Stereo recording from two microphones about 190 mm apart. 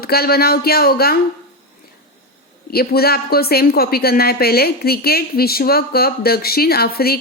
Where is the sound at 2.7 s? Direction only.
55° left (ahead or behind).